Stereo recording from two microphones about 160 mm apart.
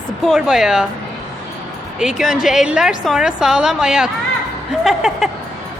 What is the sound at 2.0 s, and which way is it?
Speech, centre (ahead or behind).